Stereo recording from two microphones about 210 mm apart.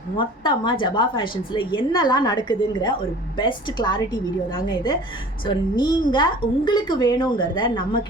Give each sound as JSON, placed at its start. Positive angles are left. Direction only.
{"t": 0.2, "sound": "a woman's voice", "side_deg": 20}